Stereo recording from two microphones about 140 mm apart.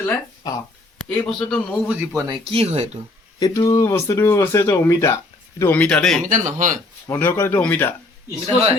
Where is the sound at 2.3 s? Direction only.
40° right (ahead or behind).